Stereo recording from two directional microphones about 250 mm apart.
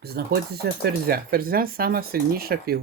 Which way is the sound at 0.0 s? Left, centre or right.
Right.